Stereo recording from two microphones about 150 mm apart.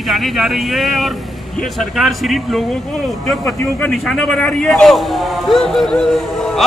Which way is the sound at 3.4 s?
15° left (ahead or behind).